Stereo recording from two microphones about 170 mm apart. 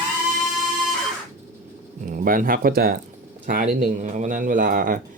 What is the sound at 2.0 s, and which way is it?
Speech, 55° right (ahead or behind).